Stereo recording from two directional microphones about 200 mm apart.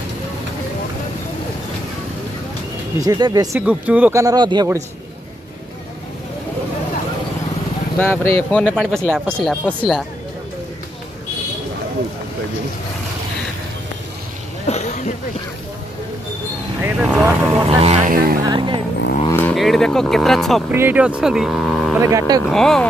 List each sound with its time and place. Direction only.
3.0 s speech: 20° right (ahead or behind)
3.6 s speech: 5° right (ahead or behind)
8.0 s speech: 10° left (ahead or behind)
14.7 s a sound: 35° left (ahead or behind)
16.8 s vehicle: 10° right (ahead or behind)
17.6 s vehicle: 30° right (ahead or behind)
18.1 s music: 45° right (ahead or behind)
18.4 s a sound: 25° right (ahead or behind)
19.3 s speech: 5° left (ahead or behind)
20.7 s speech: 10° right (ahead or behind)